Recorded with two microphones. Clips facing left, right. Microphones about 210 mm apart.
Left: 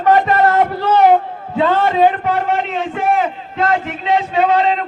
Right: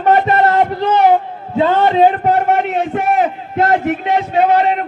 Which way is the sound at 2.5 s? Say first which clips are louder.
Right 4 dB; 45° right (ahead or behind).